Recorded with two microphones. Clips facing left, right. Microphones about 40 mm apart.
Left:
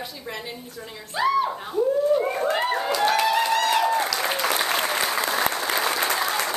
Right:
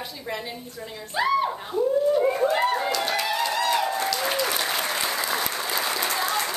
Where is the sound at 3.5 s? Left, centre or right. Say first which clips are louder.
Left 3 dB; left.